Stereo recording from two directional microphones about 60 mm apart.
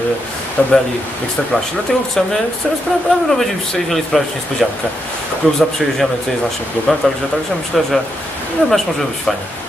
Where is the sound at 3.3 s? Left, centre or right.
Centre.